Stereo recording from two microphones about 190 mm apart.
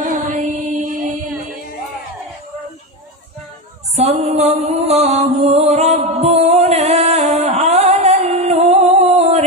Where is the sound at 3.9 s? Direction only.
35° right (ahead or behind).